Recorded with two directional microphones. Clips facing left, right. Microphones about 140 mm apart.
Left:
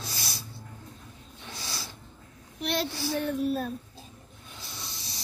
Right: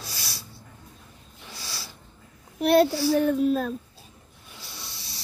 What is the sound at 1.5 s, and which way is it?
Snort, 20° left (ahead or behind).